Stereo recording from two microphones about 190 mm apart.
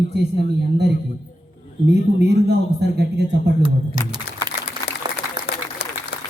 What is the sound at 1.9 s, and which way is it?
Speech, 65° right (ahead or behind).